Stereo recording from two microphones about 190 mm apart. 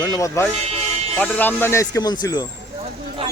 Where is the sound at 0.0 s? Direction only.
20° left (ahead or behind).